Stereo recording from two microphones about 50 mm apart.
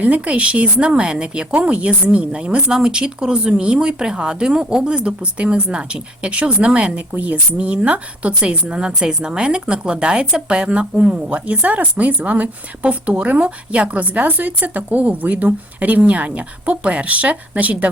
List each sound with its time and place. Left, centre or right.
0.0 s speech: right